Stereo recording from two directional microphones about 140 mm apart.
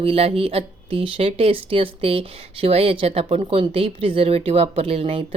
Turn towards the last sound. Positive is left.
turn(degrees=-45)  # may be behind; listen again after turning